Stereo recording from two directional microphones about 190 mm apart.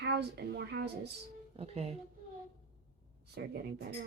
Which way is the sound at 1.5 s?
30° right (ahead or behind).